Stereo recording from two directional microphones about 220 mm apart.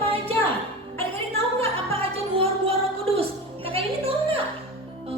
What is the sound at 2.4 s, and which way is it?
Music, 25° right (ahead or behind).